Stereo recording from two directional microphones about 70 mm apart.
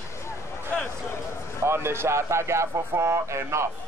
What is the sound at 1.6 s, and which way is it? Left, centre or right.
Speech, right.